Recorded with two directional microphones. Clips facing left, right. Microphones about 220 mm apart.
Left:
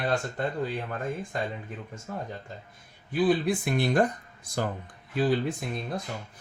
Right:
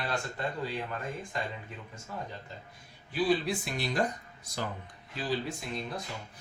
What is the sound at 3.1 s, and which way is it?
Speech, 55° left (ahead or behind).